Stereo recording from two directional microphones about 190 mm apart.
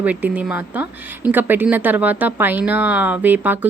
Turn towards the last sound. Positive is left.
turn(degrees=-10)  # may be behind; listen again after turning